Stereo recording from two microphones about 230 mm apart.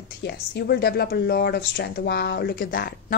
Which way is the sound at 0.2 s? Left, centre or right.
Left.